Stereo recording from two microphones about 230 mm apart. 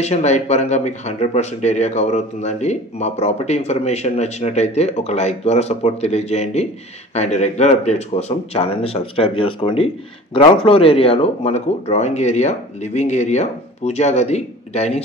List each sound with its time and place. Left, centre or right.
0.0 s speech: left